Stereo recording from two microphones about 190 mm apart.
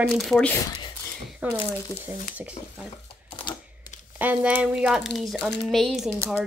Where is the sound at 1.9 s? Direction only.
15° left (ahead or behind).